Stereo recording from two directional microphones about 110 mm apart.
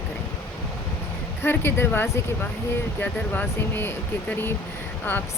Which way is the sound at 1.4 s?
20° left (ahead or behind).